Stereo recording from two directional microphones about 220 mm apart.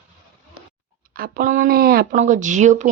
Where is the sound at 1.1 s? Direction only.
40° right (ahead or behind).